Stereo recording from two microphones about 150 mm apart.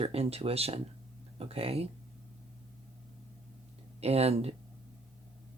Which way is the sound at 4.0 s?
45° right (ahead or behind).